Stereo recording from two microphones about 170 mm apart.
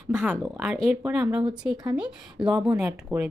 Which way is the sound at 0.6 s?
5° right (ahead or behind).